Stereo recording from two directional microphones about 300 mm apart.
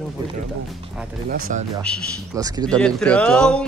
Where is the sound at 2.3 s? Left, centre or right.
Centre.